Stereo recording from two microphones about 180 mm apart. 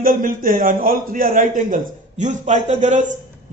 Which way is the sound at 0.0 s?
50° right (ahead or behind).